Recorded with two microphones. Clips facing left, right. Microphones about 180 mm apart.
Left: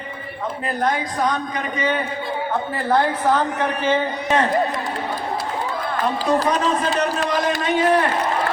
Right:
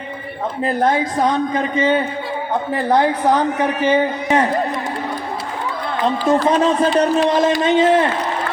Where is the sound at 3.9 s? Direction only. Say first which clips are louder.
Right 3 dB; 15° right (ahead or behind).